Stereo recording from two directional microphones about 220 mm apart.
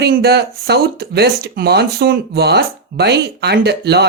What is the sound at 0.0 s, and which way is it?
Speech, 45° right (ahead or behind).